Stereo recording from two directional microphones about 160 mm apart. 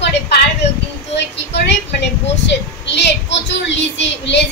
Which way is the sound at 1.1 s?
90° left.